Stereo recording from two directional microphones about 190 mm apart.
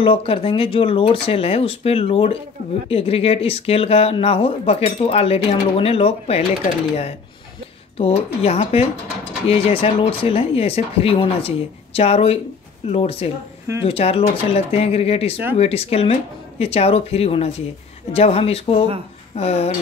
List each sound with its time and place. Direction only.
0.0 s speech: 30° left (ahead or behind)
8.0 s speech: 35° left (ahead or behind)